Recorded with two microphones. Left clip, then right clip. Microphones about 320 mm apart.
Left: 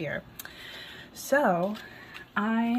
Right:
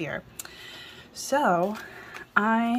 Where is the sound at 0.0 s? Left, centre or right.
Centre.